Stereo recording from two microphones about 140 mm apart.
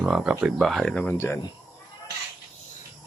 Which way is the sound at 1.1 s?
20° left (ahead or behind).